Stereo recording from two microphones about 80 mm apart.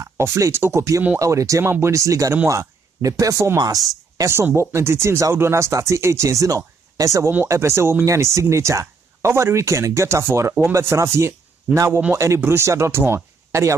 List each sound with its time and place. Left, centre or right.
0.0 s speech: right
4.2 s speech: right